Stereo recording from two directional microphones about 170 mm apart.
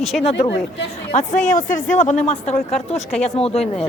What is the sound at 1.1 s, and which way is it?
A woman's voice, 50° left (ahead or behind).